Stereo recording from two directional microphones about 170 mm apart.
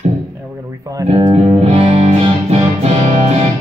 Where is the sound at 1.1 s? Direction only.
35° right (ahead or behind).